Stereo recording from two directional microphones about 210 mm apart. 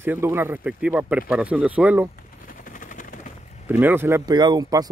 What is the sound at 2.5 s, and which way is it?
Helicopter, 40° left (ahead or behind).